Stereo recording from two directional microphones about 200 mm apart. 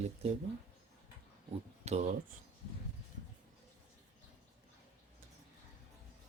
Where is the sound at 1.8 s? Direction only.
35° right (ahead or behind).